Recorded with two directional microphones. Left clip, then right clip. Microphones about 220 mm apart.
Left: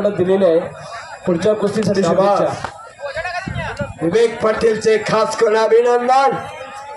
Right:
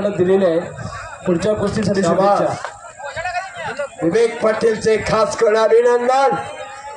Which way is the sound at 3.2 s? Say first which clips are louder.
Right 1 dB; 50° left (ahead or behind).